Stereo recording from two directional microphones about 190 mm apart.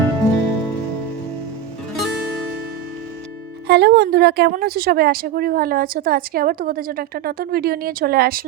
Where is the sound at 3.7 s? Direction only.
60° right (ahead or behind).